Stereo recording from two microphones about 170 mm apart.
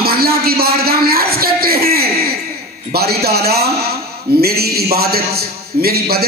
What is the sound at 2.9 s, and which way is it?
A man's voice, 65° right (ahead or behind).